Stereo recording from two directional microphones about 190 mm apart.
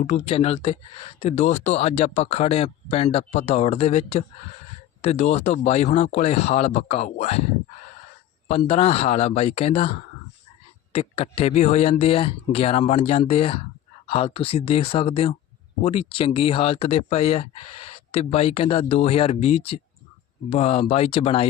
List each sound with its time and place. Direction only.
0.0 s speech: 35° left (ahead or behind)
8.4 s speech: 35° left (ahead or behind)